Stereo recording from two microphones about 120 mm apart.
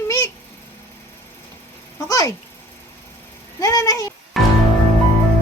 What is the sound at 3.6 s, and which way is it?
Speech, 30° left (ahead or behind).